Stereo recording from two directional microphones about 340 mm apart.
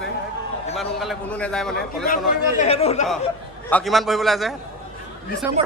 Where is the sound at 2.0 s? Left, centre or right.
Left.